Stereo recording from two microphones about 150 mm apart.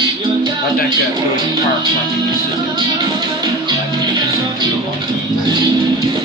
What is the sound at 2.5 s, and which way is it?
Music, 30° right (ahead or behind).